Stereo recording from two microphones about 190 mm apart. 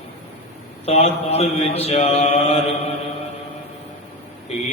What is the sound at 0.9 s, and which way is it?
Mantra, 35° left (ahead or behind).